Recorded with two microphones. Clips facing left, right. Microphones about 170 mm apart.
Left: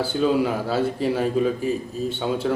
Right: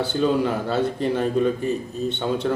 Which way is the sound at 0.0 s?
5° left (ahead or behind).